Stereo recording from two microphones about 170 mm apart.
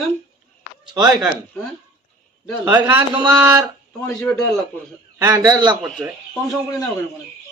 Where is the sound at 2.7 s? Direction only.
10° right (ahead or behind).